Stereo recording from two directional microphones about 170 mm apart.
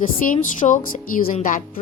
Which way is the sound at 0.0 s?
50° left (ahead or behind).